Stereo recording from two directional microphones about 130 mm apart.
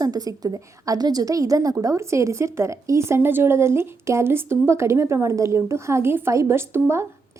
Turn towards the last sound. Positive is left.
turn(degrees=-20)  # may be behind; listen again after turning